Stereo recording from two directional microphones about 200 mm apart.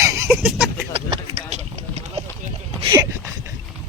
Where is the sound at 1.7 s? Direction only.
35° right (ahead or behind).